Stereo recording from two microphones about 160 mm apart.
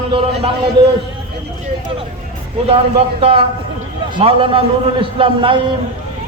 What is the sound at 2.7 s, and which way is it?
A man's voice, 35° right (ahead or behind).